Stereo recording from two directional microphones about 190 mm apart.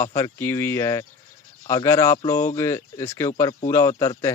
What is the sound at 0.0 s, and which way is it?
Speech, 15° left (ahead or behind).